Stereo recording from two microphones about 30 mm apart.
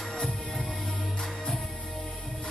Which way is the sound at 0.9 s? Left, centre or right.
Left.